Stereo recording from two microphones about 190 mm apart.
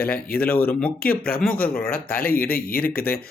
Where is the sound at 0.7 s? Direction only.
5° left (ahead or behind).